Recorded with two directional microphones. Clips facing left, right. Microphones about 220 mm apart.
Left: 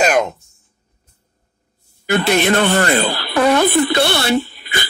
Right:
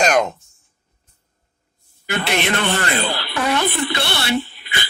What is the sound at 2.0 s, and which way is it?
A woman's voice, 45° left (ahead or behind).